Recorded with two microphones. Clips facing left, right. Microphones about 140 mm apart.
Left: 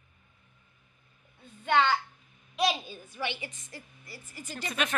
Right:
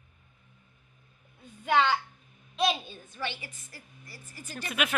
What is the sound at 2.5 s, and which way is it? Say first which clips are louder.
A child's voice: even; 5° left (ahead or behind).